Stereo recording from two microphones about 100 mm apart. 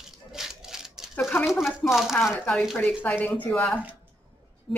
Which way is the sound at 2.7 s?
15° left (ahead or behind).